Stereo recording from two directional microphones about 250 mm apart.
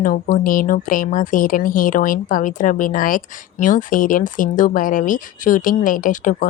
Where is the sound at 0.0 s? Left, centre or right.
Left.